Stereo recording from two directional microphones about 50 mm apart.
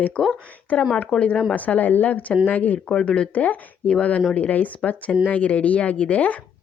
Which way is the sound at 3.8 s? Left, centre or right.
Centre.